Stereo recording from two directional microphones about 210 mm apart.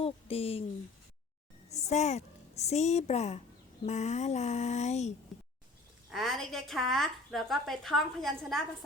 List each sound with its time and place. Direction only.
0.0 s speech: 25° left (ahead or behind)
1.7 s a woman's voice: 30° left (ahead or behind)
3.8 s a sound: 35° left (ahead or behind)
6.1 s a woman's voice: centre (ahead or behind)